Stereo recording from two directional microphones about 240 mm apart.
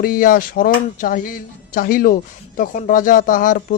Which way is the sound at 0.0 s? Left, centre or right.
Left.